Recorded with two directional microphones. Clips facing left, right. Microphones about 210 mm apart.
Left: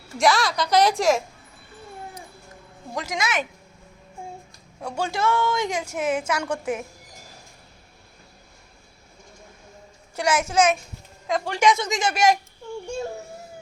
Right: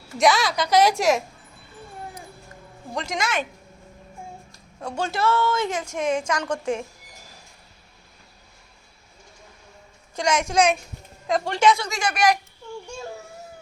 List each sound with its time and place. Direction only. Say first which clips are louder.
0.2 s a woman's voice: right 1 dB; centre (ahead or behind)
2.9 s a woman's voice: even; 10° left (ahead or behind)
4.8 s a woman's voice: even; 10° left (ahead or behind)
10.2 s a woman's voice: even; 5° left (ahead or behind); by 12.4 s 25° left (ahead or behind)